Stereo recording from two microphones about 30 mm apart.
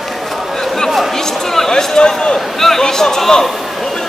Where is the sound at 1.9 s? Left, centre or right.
Left.